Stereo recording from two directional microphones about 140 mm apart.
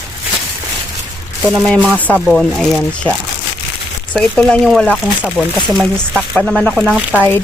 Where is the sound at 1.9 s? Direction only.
5° left (ahead or behind).